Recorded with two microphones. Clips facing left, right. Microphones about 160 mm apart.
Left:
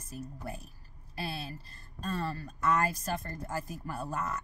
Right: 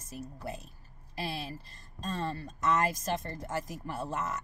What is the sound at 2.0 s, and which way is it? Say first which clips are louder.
Speech: even; 30° right (ahead or behind).